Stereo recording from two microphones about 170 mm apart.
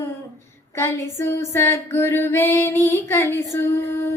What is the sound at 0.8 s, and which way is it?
Child singing, 15° left (ahead or behind).